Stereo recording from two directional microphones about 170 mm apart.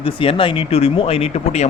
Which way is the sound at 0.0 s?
35° left (ahead or behind).